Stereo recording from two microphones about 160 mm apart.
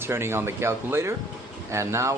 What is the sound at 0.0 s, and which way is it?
Speech, 15° right (ahead or behind).